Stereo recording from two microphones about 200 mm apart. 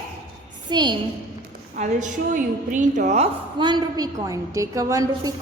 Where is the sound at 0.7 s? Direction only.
20° right (ahead or behind).